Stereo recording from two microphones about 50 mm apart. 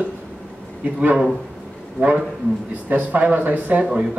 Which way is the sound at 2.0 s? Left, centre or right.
Right.